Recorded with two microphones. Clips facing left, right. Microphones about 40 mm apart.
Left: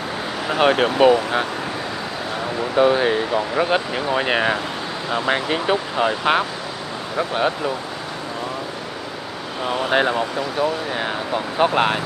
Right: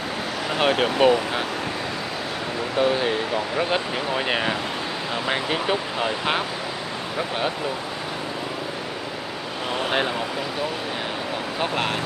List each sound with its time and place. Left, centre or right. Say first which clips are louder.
0.5 s speech: left 4 dB; centre
2.7 s speech: left 5 dB; centre
9.9 s speech: left 7 dB; centre
11.3 s speech: left 9 dB; centre